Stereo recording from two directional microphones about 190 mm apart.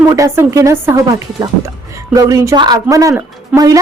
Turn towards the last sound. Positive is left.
turn(degrees=-20)  # may be behind; listen again after turning